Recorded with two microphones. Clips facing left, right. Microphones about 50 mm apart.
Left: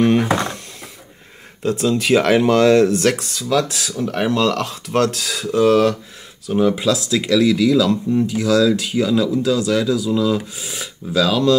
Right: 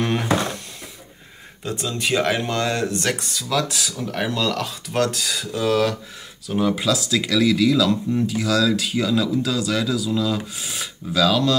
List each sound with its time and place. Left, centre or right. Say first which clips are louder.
0.0 s a sound: left 8 dB; left
1.6 s speech: left 8 dB; left
3.4 s speech: left 4 dB; left
6.5 s speech: left 4 dB; left
7.1 s speech: left 4 dB; left